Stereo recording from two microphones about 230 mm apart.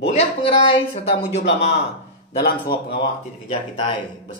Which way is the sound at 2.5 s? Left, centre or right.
Left.